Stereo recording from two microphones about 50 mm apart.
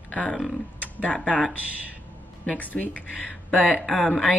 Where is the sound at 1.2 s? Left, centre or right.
Left.